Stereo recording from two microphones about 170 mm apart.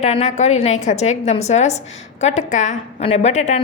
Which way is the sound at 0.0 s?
40° left (ahead or behind).